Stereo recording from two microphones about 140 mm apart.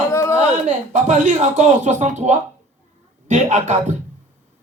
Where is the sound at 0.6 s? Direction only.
60° right (ahead or behind).